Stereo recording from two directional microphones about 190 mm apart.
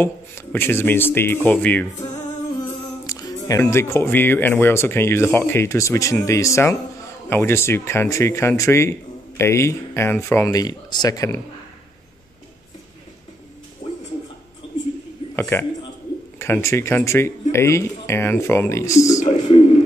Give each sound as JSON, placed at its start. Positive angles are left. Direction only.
{"t": 0.0, "sound": "speech", "side_deg": 10}
{"t": 2.6, "sound": "humming", "side_deg": 20}
{"t": 3.6, "sound": "speech", "side_deg": 15}
{"t": 13.8, "sound": "a sound", "side_deg": 40}
{"t": 15.3, "sound": "a man's voice", "side_deg": 15}
{"t": 19.1, "sound": "a sound", "side_deg": 40}